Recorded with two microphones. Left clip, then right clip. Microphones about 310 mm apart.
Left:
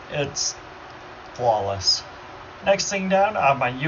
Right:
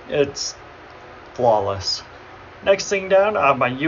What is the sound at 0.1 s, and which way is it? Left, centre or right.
A man's voice, centre.